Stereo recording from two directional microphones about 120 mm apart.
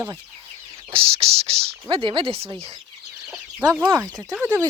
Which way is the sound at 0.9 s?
50° right (ahead or behind).